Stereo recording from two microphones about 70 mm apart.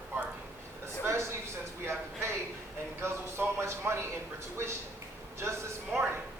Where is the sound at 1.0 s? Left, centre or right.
Right.